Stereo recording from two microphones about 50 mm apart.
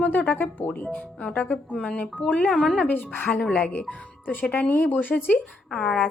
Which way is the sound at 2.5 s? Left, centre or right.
Centre.